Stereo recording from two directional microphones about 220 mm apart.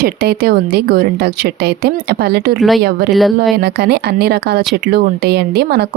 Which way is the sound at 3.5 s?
45° right (ahead or behind).